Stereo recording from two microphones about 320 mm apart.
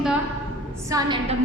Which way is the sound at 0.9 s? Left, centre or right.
Centre.